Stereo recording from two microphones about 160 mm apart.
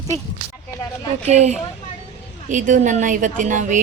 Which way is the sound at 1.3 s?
45° right (ahead or behind).